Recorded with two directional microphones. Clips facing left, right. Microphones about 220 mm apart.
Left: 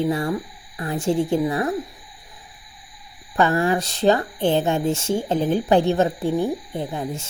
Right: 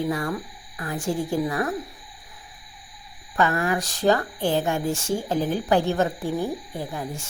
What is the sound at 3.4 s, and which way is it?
Speech, 30° left (ahead or behind).